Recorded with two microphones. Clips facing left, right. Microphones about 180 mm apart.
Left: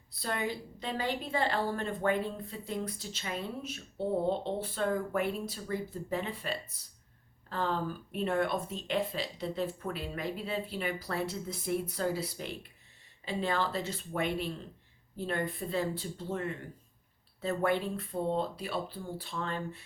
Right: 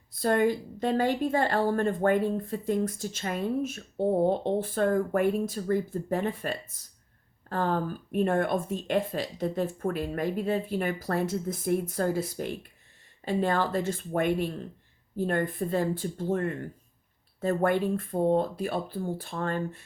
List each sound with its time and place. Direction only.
0.1 s a woman's voice: 50° right (ahead or behind)